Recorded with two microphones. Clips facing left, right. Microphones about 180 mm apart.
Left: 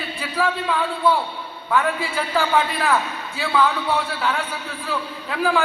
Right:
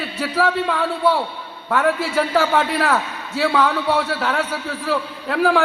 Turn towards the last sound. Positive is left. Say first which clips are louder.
# right 4 dB
turn(degrees=-75)  # may be behind; listen again after turning